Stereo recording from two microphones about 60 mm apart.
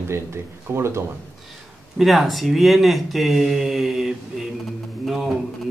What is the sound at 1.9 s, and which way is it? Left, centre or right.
Speech, centre.